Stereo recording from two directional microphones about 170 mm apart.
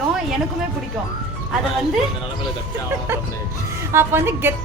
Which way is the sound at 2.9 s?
15° right (ahead or behind).